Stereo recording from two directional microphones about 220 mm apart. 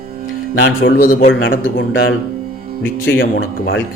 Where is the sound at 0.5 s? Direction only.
60° left (ahead or behind).